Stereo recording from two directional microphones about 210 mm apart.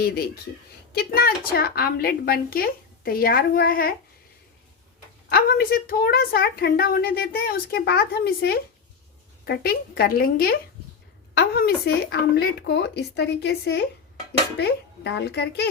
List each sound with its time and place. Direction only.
0.9 s a woman's voice: 45° left (ahead or behind)
5.3 s a woman's voice: 45° left (ahead or behind)